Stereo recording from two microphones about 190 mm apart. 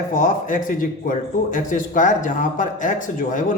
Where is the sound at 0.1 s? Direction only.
45° left (ahead or behind).